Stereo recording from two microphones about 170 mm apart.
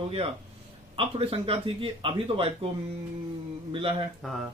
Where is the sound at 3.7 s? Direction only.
30° right (ahead or behind).